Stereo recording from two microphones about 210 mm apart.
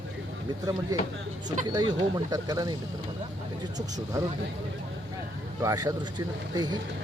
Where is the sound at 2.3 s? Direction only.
15° right (ahead or behind).